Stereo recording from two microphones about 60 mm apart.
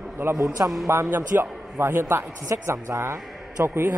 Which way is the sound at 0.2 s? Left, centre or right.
Right.